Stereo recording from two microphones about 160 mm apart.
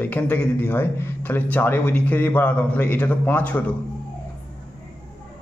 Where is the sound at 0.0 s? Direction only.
10° left (ahead or behind).